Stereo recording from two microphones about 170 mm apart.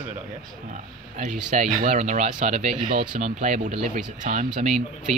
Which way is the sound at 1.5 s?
50° right (ahead or behind).